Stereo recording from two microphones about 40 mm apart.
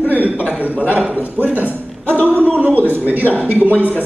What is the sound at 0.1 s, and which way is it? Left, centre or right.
A man's voice, right.